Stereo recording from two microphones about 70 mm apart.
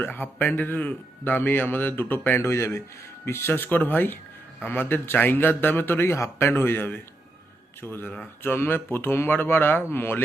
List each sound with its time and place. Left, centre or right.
0.0 s a man's voice: left